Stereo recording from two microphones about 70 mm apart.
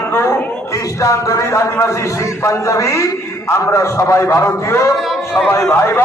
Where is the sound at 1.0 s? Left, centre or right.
Left.